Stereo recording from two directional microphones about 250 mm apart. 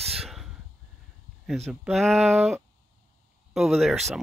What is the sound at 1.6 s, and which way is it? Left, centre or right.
Speech, centre.